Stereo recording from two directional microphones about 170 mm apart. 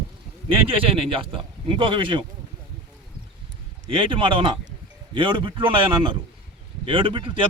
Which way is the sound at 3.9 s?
30° right (ahead or behind).